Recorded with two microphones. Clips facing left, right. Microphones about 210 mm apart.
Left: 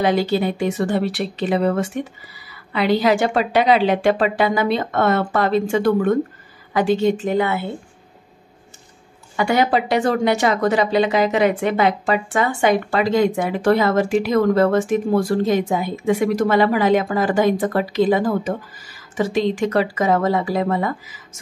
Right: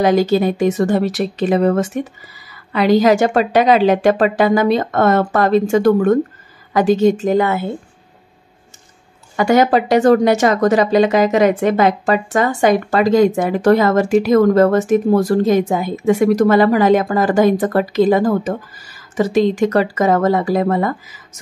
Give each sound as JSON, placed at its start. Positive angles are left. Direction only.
{"t": 0.0, "sound": "speech", "side_deg": -45}
{"t": 9.4, "sound": "speech", "side_deg": -45}